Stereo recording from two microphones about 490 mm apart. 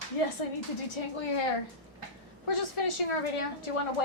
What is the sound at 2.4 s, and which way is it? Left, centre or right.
Speech, left.